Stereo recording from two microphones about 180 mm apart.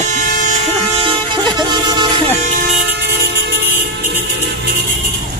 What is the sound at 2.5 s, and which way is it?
Vehicle, 50° right (ahead or behind).